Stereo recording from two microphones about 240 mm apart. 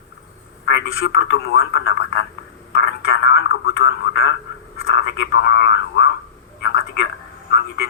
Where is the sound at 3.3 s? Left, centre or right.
Left.